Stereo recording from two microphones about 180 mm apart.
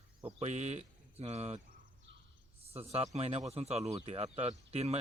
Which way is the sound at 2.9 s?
35° right (ahead or behind).